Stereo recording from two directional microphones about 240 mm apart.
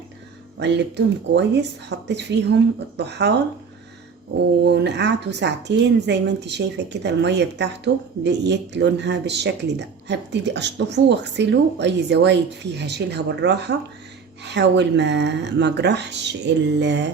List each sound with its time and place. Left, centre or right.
0.6 s speech: right
4.6 s speech: right